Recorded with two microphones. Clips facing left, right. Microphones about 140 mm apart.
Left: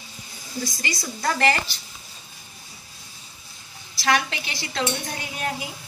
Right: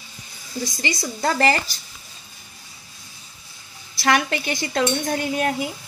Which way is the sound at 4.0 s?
50° right (ahead or behind).